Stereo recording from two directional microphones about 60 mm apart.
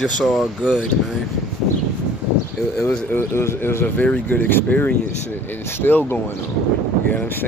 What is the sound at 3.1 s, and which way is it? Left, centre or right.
Speech, left.